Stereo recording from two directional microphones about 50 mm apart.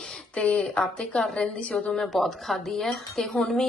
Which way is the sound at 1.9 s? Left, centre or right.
Centre.